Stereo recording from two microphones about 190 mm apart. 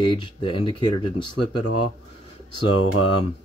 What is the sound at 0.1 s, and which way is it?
Speech, 25° left (ahead or behind).